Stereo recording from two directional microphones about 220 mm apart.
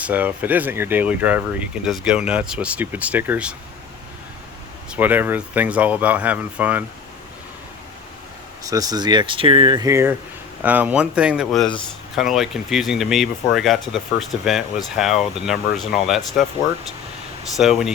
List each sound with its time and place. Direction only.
0.0 s speech: 5° right (ahead or behind)
4.9 s speech: 10° right (ahead or behind)
8.6 s speech: 15° right (ahead or behind); by 16.5 s centre (ahead or behind)
17.6 s speech: centre (ahead or behind)